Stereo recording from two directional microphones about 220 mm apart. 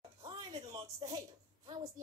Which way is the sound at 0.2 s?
20° right (ahead or behind).